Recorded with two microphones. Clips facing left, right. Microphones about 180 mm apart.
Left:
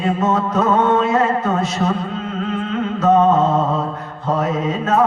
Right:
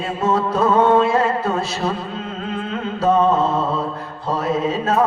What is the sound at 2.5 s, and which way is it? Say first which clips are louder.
Carnatic music: left 3 dB; 30° right (ahead or behind).